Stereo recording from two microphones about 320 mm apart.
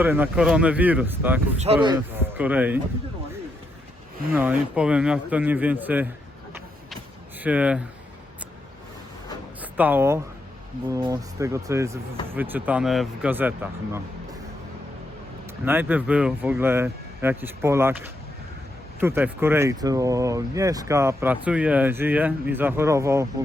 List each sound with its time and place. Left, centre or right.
0.0 s a man's voice: centre
1.5 s speech: centre
2.4 s a man's voice: centre
4.3 s a man's voice: centre
7.4 s a man's voice: centre
9.6 s a man's voice: centre
15.6 s speech: centre